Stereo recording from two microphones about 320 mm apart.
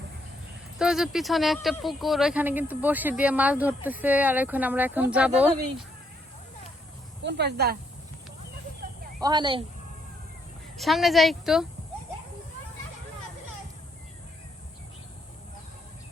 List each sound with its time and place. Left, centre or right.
0.8 s speech: centre
7.2 s speech: right
9.2 s speech: centre
10.8 s speech: centre